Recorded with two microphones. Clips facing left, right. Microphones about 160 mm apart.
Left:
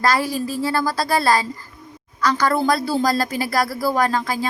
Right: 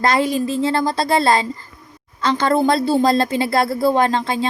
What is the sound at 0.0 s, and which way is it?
A woman's voice, 20° right (ahead or behind).